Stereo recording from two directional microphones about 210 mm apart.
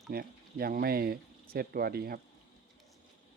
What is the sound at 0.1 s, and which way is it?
Speech, 45° right (ahead or behind).